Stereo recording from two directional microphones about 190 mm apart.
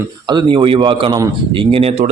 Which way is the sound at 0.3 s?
25° right (ahead or behind).